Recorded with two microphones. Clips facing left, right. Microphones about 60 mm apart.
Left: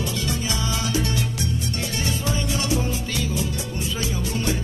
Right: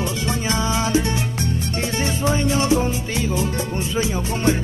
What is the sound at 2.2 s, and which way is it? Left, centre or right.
Music, right.